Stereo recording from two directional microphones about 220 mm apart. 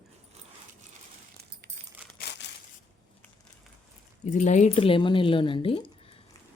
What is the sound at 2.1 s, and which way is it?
Crumpling, 50° left (ahead or behind).